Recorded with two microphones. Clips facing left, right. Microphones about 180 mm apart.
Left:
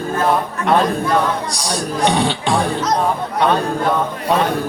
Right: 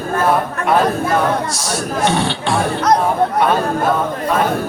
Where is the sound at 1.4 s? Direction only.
15° left (ahead or behind).